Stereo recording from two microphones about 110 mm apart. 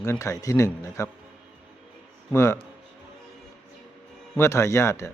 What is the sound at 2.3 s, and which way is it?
Speech, 25° left (ahead or behind).